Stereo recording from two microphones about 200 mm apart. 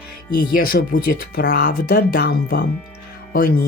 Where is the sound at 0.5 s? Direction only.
45° left (ahead or behind).